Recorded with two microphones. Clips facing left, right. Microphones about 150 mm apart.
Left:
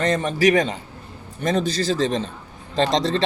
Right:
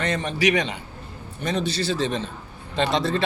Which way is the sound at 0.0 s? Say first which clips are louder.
Left 4 dB; 40° left (ahead or behind).